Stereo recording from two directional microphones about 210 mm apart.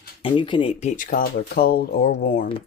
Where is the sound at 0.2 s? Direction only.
25° left (ahead or behind).